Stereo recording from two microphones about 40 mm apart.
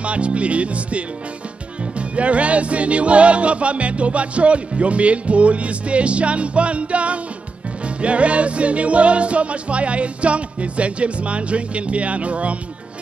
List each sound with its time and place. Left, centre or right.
0.0 s music: right